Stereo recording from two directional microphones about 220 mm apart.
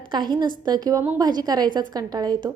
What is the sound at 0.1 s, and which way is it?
A woman's voice, 20° right (ahead or behind).